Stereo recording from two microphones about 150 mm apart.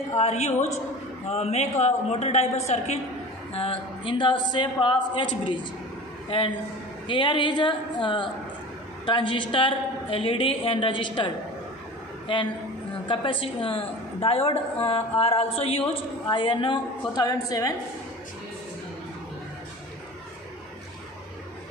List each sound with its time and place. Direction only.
0.1 s a man's voice: 45° left (ahead or behind)
3.5 s a woman's voice: 35° left (ahead or behind)
7.1 s a woman's voice: 35° left (ahead or behind)
13.1 s a woman's voice: 35° left (ahead or behind)